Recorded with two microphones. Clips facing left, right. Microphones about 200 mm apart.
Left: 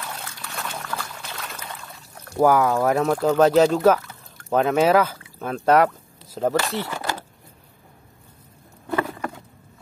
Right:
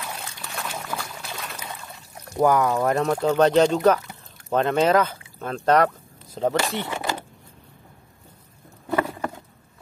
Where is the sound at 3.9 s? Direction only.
10° right (ahead or behind).